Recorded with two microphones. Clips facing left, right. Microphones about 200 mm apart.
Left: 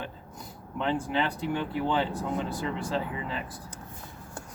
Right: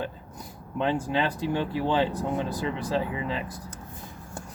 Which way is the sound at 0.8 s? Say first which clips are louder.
Right 2 dB; 15° right (ahead or behind).